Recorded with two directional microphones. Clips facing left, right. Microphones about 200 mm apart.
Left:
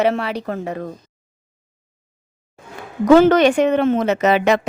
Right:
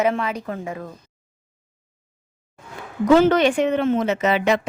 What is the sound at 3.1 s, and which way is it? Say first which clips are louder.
A woman's voice: left 4 dB; 70° left (ahead or behind).